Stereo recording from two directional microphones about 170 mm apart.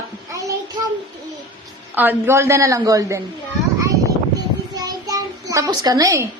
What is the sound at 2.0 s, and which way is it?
A woman's voice, 10° right (ahead or behind).